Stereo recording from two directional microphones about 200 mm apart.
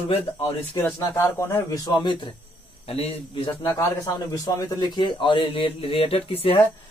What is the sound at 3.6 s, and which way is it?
A man's voice, 10° left (ahead or behind).